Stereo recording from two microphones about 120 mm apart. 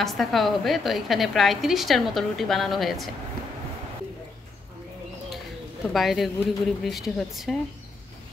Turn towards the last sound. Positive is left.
turn(degrees=5)  # may be behind; listen again after turning